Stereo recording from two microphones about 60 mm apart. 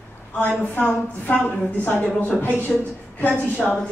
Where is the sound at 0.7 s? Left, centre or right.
Left.